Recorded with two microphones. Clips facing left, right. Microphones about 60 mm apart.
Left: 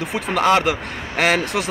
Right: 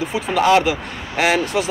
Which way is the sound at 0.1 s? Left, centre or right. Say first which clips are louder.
Right 2 dB; left.